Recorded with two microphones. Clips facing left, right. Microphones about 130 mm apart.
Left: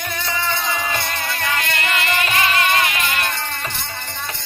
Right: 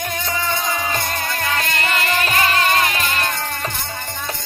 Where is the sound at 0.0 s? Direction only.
45° right (ahead or behind).